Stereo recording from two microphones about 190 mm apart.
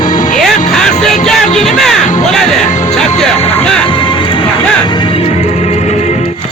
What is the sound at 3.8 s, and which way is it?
Music, 25° left (ahead or behind).